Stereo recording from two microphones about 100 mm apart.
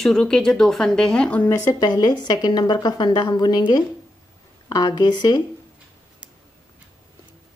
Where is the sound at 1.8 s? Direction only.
45° left (ahead or behind).